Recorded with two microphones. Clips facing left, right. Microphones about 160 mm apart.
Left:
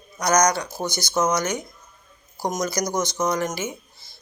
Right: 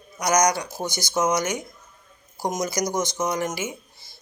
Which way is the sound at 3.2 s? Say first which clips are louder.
Left 2 dB; 20° right (ahead or behind).